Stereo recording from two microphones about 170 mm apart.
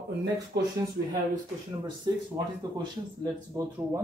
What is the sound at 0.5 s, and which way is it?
Speech, 80° right.